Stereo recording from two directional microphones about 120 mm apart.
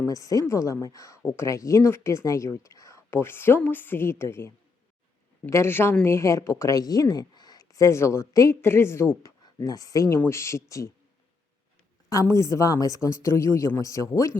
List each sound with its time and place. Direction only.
0.0 s speech: 30° left (ahead or behind)
12.0 s speech: 30° left (ahead or behind)